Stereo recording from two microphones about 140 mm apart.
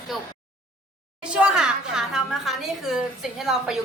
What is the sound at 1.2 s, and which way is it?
A woman's voice, 5° right (ahead or behind).